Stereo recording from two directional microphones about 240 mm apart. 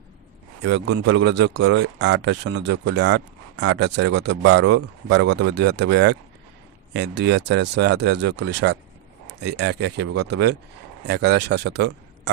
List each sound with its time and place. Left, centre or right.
0.6 s speech: right